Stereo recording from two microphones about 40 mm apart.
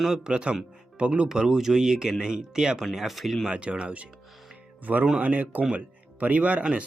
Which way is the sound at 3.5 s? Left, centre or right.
Right.